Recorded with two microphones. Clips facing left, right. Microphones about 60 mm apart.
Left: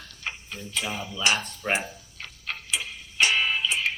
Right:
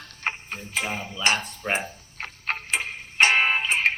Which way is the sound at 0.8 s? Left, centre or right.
Right.